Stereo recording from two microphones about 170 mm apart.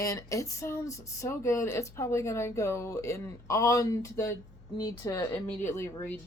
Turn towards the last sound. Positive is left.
turn(degrees=15)  # may be behind; listen again after turning